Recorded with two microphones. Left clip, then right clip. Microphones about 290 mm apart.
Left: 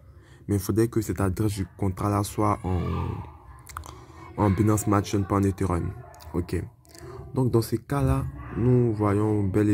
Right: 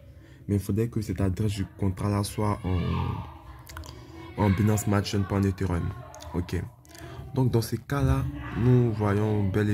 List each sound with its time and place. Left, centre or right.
0.5 s speech: left
4.4 s speech: centre